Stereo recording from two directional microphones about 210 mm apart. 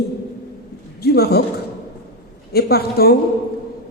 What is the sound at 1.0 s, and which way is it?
Speech, 50° left (ahead or behind).